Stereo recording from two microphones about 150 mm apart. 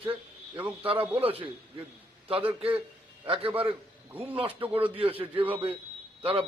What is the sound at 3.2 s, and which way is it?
Speech, 40° right (ahead or behind).